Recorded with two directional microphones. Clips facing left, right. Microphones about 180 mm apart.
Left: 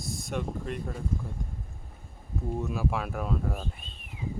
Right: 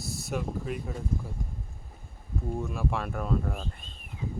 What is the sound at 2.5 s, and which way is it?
Speech, 5° left (ahead or behind).